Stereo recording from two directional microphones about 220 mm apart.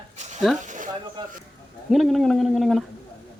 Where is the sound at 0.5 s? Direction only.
35° right (ahead or behind).